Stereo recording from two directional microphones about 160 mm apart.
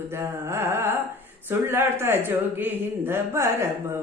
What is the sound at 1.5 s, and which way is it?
Speech, 15° right (ahead or behind).